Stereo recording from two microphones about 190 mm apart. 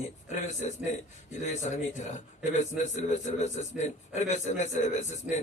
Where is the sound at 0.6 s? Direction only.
40° left (ahead or behind).